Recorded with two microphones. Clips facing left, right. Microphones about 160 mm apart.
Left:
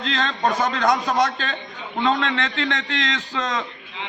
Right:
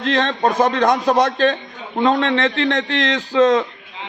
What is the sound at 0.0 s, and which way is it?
Speech, 50° right (ahead or behind).